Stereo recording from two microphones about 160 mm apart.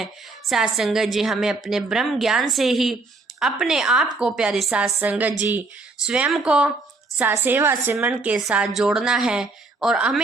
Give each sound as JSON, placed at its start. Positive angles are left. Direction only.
{"t": 0.0, "sound": "a woman's voice", "side_deg": 0}